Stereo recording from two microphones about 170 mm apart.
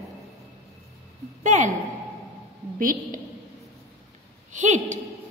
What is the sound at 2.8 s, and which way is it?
Speech, 55° right (ahead or behind).